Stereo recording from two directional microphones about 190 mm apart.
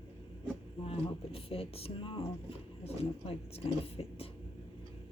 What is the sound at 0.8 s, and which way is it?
Speech, 30° left (ahead or behind).